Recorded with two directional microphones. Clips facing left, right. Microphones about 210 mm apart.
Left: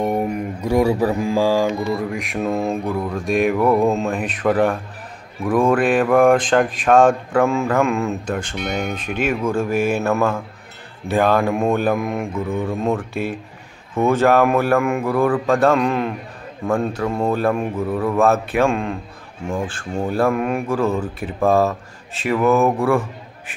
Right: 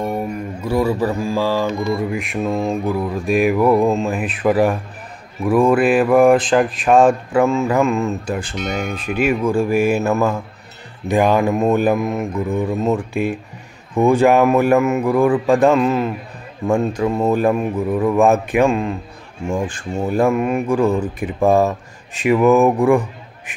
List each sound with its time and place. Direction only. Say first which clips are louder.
0.0 s mantra: left 2 dB; 20° left (ahead or behind)
2.0 s mantra: right 2 dB; centre (ahead or behind)
5.4 s speech: right 3 dB; 5° right (ahead or behind)
10.0 s mantra: right 1 dB; 5° right (ahead or behind)
12.4 s speech: right 3 dB; 10° right (ahead or behind)
14.8 s mantra: right 3 dB; 5° right (ahead or behind)
16.6 s speech: right 3 dB; 10° right (ahead or behind)
18.7 s mantra: right 3 dB; 5° right (ahead or behind)
19.4 s speech: right 3 dB; 10° right (ahead or behind)
20.6 s a man's voice: right 3 dB; 15° right (ahead or behind)